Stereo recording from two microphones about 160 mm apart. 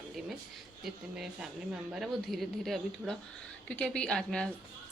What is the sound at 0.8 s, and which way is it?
A woman's voice, 5° right (ahead or behind).